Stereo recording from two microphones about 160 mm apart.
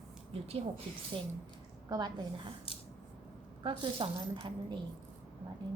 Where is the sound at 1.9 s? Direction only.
25° right (ahead or behind).